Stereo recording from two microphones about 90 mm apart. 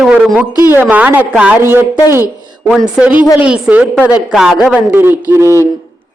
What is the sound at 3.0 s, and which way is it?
A woman's voice, 15° right (ahead or behind).